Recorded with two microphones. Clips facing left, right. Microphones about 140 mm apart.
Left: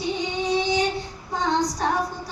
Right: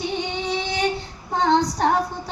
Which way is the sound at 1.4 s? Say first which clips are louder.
Right 4 dB; 60° right (ahead or behind).